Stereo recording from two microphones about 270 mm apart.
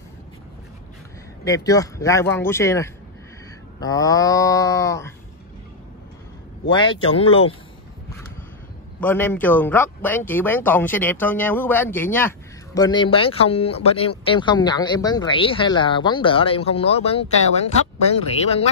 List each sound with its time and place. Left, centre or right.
1.4 s speech: centre
6.7 s speech: centre
9.0 s speech: centre; by 18.7 s left